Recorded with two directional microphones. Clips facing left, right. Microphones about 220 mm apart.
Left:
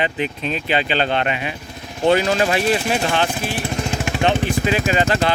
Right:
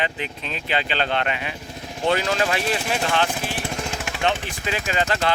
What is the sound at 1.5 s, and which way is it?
Vehicle, 35° right (ahead or behind).